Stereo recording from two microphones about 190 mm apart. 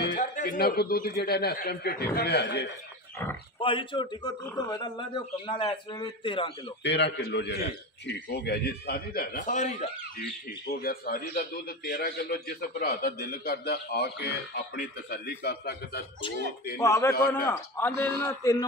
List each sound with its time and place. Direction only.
0.1 s a man's voice: 40° left (ahead or behind); by 2.7 s 60° left (ahead or behind)
3.5 s speech: 25° left (ahead or behind)
6.8 s a man's voice: 65° left (ahead or behind); by 10.2 s 40° left (ahead or behind)
10.7 s a man's voice: 50° left (ahead or behind)
16.7 s speech: 15° left (ahead or behind)